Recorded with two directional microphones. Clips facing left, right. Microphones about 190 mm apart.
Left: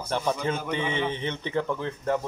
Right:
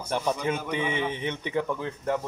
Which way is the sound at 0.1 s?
10° right (ahead or behind).